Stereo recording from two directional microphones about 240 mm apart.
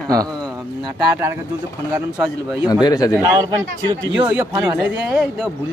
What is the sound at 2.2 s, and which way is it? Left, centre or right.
Speech, centre.